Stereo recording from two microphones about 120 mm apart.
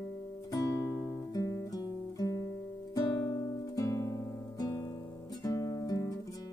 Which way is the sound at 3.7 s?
25° left (ahead or behind).